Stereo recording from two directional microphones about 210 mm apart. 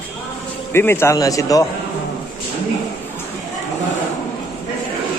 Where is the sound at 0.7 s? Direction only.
10° left (ahead or behind).